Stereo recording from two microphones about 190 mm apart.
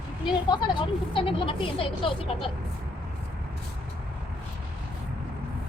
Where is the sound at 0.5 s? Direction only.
25° left (ahead or behind).